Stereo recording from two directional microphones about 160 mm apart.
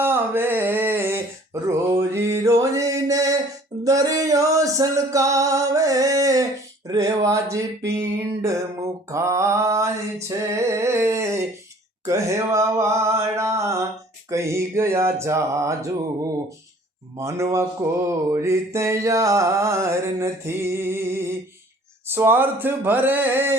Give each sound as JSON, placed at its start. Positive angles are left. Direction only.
{"t": 0.0, "sound": "a sound", "side_deg": -15}
{"t": 1.6, "sound": "music", "side_deg": -20}
{"t": 3.8, "sound": "singing", "side_deg": -20}
{"t": 6.8, "sound": "speech", "side_deg": -20}
{"t": 7.9, "sound": "music", "side_deg": -20}
{"t": 9.0, "sound": "mantra", "side_deg": -20}
{"t": 12.0, "sound": "a sound", "side_deg": -20}
{"t": 17.2, "sound": "mantra", "side_deg": -20}